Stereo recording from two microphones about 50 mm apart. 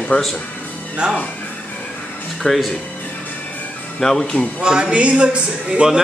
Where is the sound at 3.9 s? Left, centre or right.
Centre.